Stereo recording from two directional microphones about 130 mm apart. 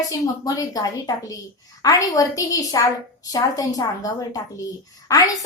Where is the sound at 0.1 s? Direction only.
25° left (ahead or behind).